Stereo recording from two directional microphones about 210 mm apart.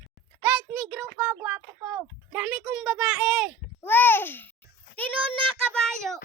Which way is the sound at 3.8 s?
10° left (ahead or behind).